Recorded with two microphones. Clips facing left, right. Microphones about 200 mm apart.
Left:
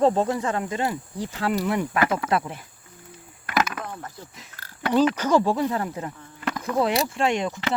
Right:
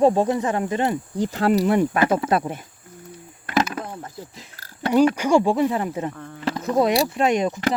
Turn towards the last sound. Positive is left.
turn(degrees=-20)  # may be behind; listen again after turning